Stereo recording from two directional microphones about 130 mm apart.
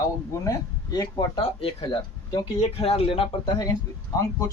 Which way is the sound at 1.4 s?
40° left (ahead or behind).